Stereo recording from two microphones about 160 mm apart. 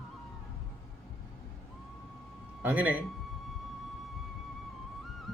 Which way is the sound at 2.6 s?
10° right (ahead or behind).